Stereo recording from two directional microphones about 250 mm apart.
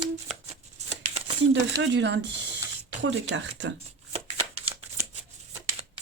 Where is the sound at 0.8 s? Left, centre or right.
Right.